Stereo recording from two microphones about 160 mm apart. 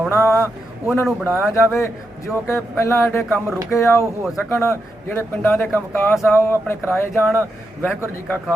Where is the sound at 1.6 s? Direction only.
15° left (ahead or behind).